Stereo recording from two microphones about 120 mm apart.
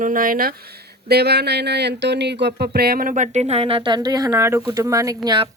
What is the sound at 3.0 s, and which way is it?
Speech, 85° right.